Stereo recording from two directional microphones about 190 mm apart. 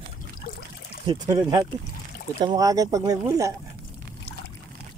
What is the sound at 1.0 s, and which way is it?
Speech, 20° right (ahead or behind).